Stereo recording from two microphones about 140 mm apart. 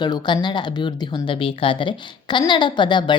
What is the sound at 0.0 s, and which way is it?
Speech, 30° left (ahead or behind).